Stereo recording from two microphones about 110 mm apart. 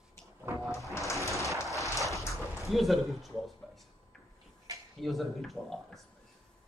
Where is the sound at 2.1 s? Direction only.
25° left (ahead or behind).